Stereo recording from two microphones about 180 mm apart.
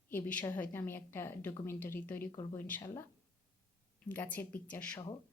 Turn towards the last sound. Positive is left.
turn(degrees=25)  # may be behind; listen again after turning